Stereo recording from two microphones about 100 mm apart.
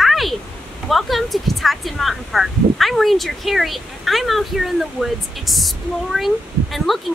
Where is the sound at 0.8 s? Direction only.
Centre (ahead or behind).